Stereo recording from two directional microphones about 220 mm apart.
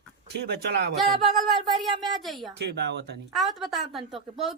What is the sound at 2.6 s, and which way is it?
Speech, 50° right (ahead or behind).